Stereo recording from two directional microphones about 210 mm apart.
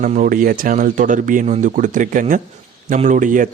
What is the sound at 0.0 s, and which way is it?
Speech, 40° right (ahead or behind).